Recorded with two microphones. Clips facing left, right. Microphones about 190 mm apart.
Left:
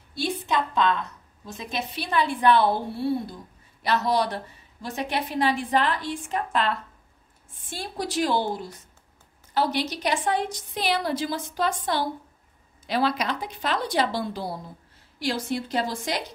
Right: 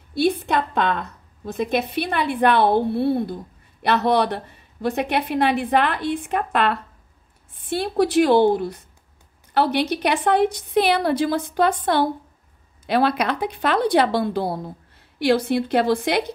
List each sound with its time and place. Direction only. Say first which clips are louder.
0.1 s a woman's voice: right 7 dB; 55° right (ahead or behind)